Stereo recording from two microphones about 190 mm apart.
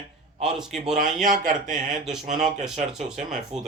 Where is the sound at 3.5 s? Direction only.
35° right (ahead or behind).